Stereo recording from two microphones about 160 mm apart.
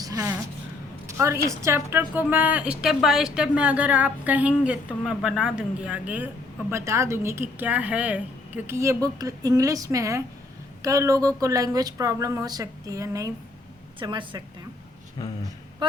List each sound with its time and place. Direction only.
0.0 s a sound: 20° right (ahead or behind)
1.0 s a woman's voice: 20° right (ahead or behind)
15.2 s speech: 20° left (ahead or behind)